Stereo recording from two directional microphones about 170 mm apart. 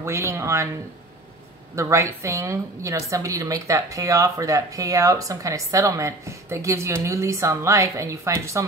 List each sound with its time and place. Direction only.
0.0 s speech: 15° right (ahead or behind)
1.8 s a woman's voice: 15° right (ahead or behind)